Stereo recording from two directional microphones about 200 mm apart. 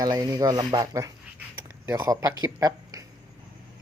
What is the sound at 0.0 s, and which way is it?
Speech, 20° right (ahead or behind).